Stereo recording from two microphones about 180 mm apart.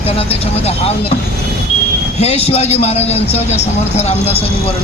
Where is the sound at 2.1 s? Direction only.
35° left (ahead or behind).